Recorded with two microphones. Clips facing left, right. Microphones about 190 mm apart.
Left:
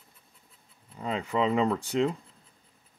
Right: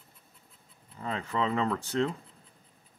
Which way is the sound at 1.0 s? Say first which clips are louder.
Left 3 dB; 15° left (ahead or behind).